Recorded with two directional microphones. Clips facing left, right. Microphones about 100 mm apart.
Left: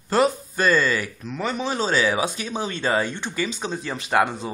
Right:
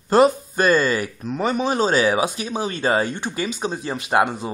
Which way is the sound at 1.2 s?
45° right (ahead or behind).